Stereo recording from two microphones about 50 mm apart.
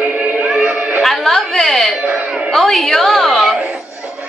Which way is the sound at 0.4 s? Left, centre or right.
Centre.